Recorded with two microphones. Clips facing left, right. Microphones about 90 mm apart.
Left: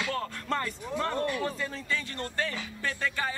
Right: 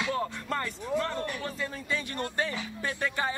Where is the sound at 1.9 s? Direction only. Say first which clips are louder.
Right 1 dB; 20° right (ahead or behind).